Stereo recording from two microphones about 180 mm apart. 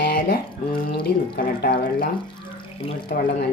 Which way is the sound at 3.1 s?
55° left (ahead or behind).